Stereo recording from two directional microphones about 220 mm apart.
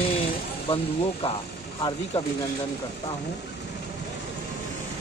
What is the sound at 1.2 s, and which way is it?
Speech, 25° left (ahead or behind).